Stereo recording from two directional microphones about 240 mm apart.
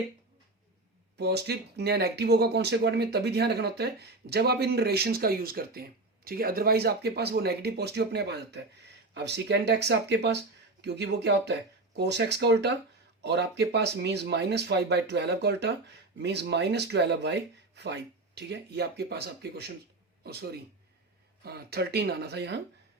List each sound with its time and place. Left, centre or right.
1.1 s speech: right